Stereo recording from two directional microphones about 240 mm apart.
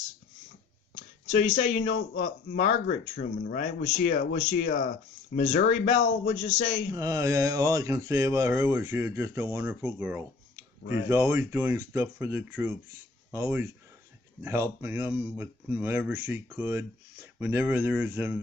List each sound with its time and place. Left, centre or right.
1.4 s speech: left
5.6 s speech: left
6.9 s speech: centre